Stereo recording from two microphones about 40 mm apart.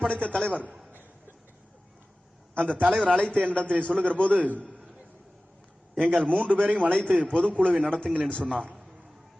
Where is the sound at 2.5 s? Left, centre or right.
Left.